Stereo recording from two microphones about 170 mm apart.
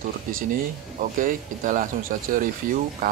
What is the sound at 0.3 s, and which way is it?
Speech, 55° right (ahead or behind).